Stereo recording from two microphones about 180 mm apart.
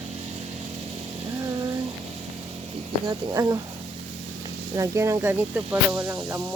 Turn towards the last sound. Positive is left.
turn(degrees=-10)  # may be behind; listen again after turning